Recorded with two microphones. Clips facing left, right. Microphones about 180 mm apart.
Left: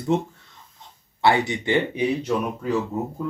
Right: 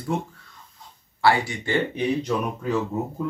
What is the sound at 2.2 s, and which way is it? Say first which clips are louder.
Speech: left 1 dB; 5° left (ahead or behind).